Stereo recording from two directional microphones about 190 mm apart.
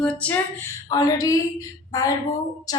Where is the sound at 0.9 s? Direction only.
20° left (ahead or behind).